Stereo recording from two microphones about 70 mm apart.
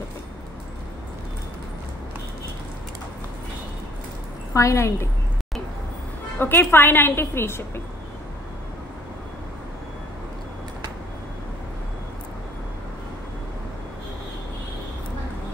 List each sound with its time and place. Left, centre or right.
4.6 s a woman's voice: left
6.3 s a woman's voice: left